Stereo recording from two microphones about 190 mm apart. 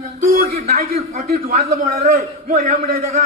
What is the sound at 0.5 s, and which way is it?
A man's voice, 50° right (ahead or behind).